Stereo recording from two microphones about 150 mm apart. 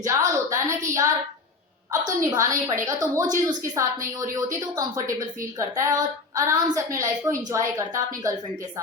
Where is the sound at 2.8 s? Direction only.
20° right (ahead or behind).